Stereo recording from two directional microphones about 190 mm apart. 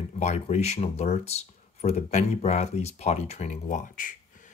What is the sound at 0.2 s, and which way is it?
Speech, 35° left (ahead or behind).